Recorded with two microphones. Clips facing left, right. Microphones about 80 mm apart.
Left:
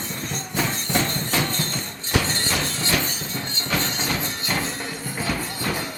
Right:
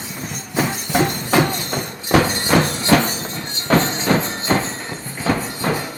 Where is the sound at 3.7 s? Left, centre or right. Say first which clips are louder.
Right 10 dB; right.